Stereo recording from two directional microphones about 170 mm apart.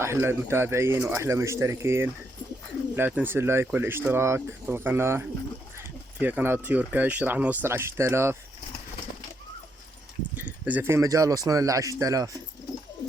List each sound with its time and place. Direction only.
0.0 s speech: 15° right (ahead or behind)
5.7 s dog: 10° right (ahead or behind)
6.7 s speech: 10° right (ahead or behind)
10.3 s speech: 10° right (ahead or behind)